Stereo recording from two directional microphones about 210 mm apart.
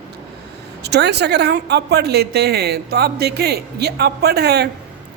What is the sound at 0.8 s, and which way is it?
A woman's voice, 55° right (ahead or behind).